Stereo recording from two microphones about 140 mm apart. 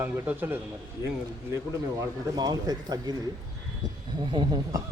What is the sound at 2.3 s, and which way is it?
Speech, 25° right (ahead or behind).